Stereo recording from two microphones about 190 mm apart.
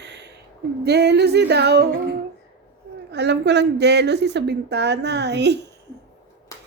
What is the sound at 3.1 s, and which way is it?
A woman's voice, 65° right (ahead or behind).